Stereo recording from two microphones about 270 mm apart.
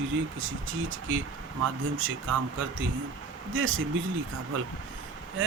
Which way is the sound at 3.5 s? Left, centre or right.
Right.